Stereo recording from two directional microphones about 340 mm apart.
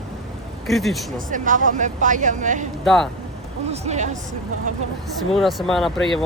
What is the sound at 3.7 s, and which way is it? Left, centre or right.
Speech, centre.